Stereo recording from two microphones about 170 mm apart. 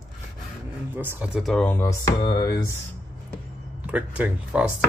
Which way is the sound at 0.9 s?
10° right (ahead or behind).